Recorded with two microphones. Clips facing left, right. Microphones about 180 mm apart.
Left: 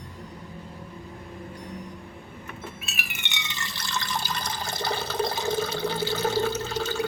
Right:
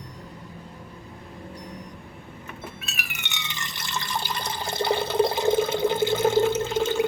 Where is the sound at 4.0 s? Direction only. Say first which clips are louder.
Right 1 dB; 25° right (ahead or behind).